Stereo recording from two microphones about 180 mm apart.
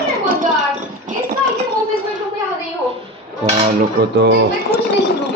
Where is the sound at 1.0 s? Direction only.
45° right (ahead or behind).